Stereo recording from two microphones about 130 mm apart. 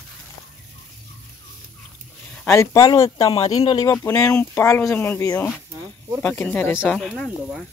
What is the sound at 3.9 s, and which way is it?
Speech, 20° left (ahead or behind).